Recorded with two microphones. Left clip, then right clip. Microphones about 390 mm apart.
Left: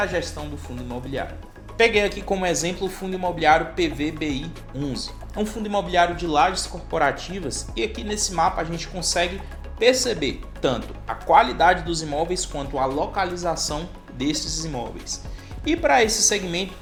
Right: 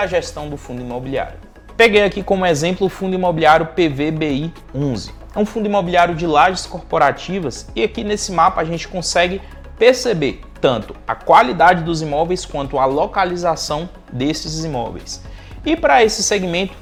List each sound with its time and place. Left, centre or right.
0.0 s speech: right